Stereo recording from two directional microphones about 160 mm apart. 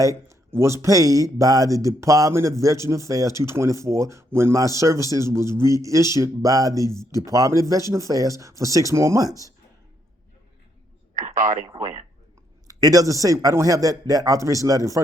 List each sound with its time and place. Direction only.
0.3 s a man's voice: 15° right (ahead or behind)
11.2 s speech: 55° right (ahead or behind)
12.6 s speech: 20° right (ahead or behind)